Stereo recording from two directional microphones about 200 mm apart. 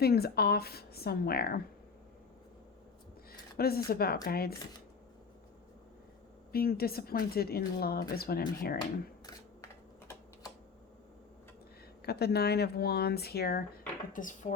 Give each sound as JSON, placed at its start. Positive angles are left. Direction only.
{"t": 0.0, "sound": "speech", "side_deg": 50}
{"t": 3.6, "sound": "speech", "side_deg": 50}
{"t": 6.5, "sound": "speech", "side_deg": 50}
{"t": 12.0, "sound": "speech", "side_deg": 55}